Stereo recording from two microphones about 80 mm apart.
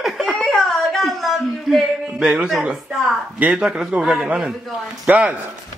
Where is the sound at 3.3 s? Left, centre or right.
Centre.